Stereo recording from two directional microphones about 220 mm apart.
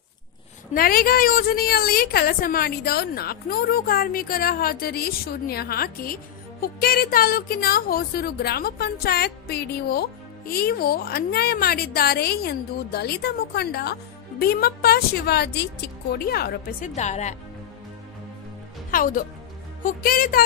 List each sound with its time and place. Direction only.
0.7 s a woman's voice: 40° left (ahead or behind)
16.9 s speech: 30° left (ahead or behind)
18.9 s speech: 40° left (ahead or behind)